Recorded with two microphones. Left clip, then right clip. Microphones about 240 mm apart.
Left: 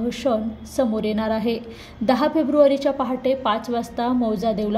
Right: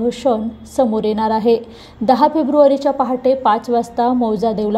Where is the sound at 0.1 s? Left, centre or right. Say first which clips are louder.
Right 5 dB; centre.